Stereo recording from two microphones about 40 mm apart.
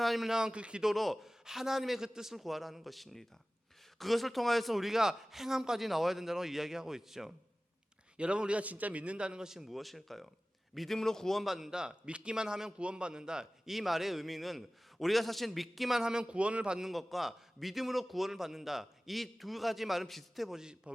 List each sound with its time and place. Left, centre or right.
0.0 s a man's voice: centre
0.3 s a man's voice: centre
0.5 s a man's voice: right
0.8 s a man's voice: centre
1.5 s a man's voice: centre
8.1 s a man's voice: right
9.5 s a man's voice: centre
10.9 s a man's voice: centre
11.3 s a man's voice: centre
11.7 s a man's voice: right
13.7 s a man's voice: centre
16.0 s a man's voice: centre
16.7 s a man's voice: centre
20.6 s a man's voice: right